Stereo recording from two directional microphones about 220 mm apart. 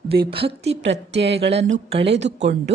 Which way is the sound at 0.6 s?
55° right (ahead or behind).